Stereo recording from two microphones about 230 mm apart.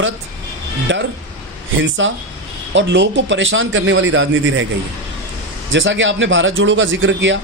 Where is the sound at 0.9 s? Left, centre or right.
Right.